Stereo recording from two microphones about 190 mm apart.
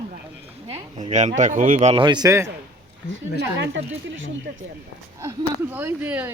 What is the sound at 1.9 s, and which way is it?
Speech, 25° right (ahead or behind).